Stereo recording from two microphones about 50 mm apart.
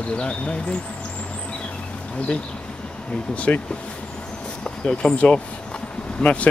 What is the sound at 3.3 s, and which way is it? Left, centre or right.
Speech, left.